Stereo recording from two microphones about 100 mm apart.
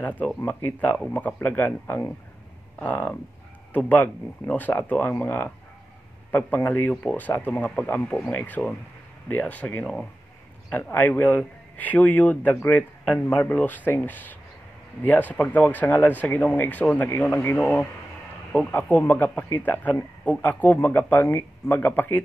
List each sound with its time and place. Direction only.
0.5 s speech: 15° left (ahead or behind)